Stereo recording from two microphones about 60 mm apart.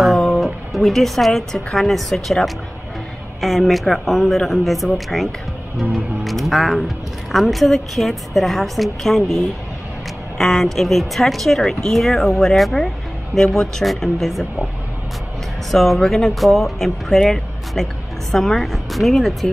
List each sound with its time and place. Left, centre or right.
0.0 s a woman's voice: centre
15.7 s speech: centre